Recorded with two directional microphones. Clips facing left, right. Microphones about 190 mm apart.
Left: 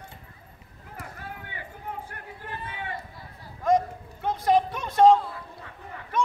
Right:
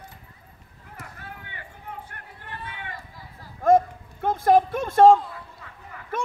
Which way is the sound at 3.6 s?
50° right (ahead or behind).